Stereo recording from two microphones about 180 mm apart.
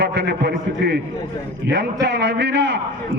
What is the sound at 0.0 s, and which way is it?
A man's voice, 70° right (ahead or behind).